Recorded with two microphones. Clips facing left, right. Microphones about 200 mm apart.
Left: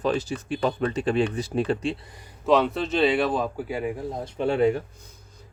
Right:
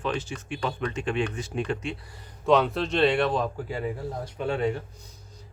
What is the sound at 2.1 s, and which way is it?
Speech, 15° left (ahead or behind).